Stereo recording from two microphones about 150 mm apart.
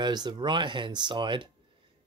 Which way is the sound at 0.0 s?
30° right (ahead or behind).